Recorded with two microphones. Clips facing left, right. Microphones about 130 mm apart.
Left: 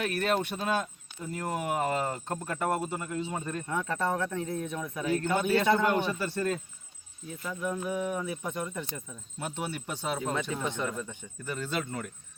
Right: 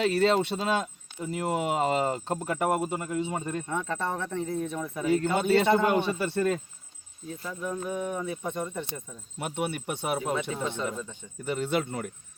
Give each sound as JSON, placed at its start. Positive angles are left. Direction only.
{"t": 0.0, "sound": "speech", "side_deg": -90}
{"t": 0.5, "sound": "speech", "side_deg": -25}
{"t": 4.1, "sound": "speech", "side_deg": 0}
{"t": 5.0, "sound": "speech", "side_deg": -25}
{"t": 7.6, "sound": "a sound", "side_deg": 5}
{"t": 7.9, "sound": "speech", "side_deg": -30}